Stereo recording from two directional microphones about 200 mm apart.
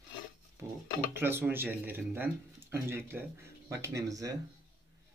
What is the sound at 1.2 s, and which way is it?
Speech, 10° right (ahead or behind).